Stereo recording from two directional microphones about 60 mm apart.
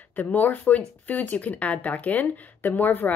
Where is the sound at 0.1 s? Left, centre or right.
Left.